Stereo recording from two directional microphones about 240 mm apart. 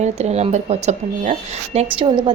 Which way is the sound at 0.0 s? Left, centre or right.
Right.